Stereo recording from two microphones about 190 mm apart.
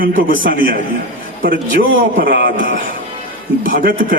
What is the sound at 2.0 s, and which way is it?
Speech, 50° right (ahead or behind).